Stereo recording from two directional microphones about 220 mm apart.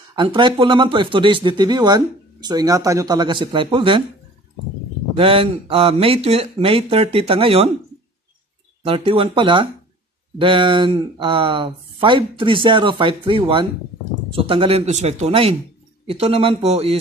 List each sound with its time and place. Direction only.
0.1 s speech: 20° right (ahead or behind)
5.1 s speech: 25° right (ahead or behind)
8.8 s speech: 25° right (ahead or behind)